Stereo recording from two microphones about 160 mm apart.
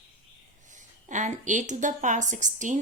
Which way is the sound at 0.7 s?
50° right (ahead or behind).